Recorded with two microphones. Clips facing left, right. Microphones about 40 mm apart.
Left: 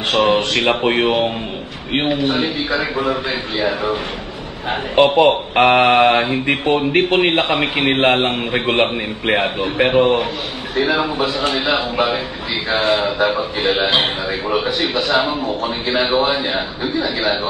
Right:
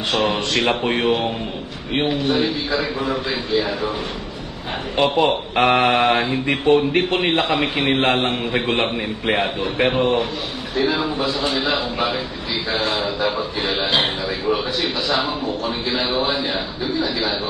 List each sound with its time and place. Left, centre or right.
0.2 s a man's voice: left
0.6 s a man's voice: left
5.0 s a man's voice: left
9.9 s a man's voice: left
13.2 s a man's voice: left